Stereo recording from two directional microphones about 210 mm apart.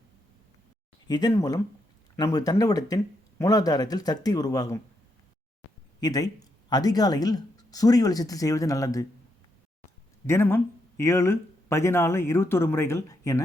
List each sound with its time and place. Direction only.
1.0 s speech: 20° left (ahead or behind)
6.0 s speech: 20° left (ahead or behind)
10.2 s speech: 10° left (ahead or behind)